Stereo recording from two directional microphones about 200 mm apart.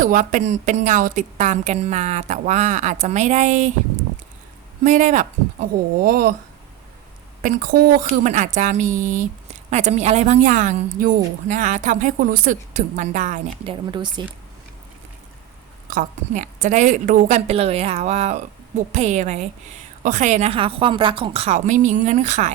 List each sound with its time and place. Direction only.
0.0 s speech: 40° right (ahead or behind)
4.8 s speech: 40° right (ahead or behind)
7.4 s speech: 45° right (ahead or behind)
13.9 s speech: 20° right (ahead or behind)
15.9 s speech: 40° right (ahead or behind)